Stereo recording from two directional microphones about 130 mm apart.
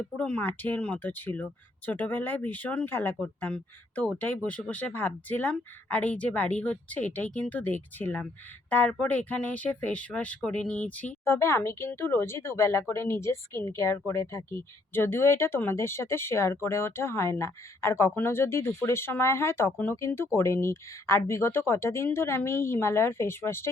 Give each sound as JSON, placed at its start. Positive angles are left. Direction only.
{"t": 0.2, "sound": "speech", "side_deg": 10}